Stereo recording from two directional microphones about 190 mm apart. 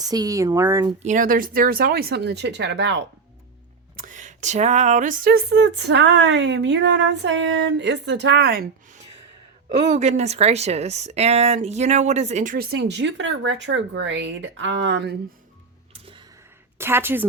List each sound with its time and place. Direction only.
0.0 s speech: 20° right (ahead or behind)
1.0 s speech: 45° right (ahead or behind); by 3.0 s 70° right (ahead or behind)
3.9 s speech: 45° right (ahead or behind)
9.6 s speech: 40° right (ahead or behind); by 15.1 s 65° right (ahead or behind)
16.7 s a woman's voice: 10° right (ahead or behind)